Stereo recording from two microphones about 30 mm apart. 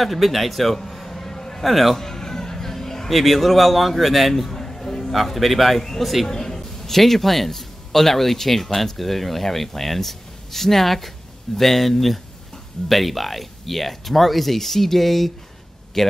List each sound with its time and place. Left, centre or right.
0.0 s a sound: centre; by 1.6 s left
1.6 s speech: centre
2.0 s music: centre
3.1 s speech: centre
4.4 s a sound: centre
5.1 s speech: centre
6.2 s a man's voice: centre